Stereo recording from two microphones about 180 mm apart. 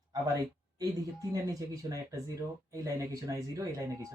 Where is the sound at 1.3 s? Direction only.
20° right (ahead or behind).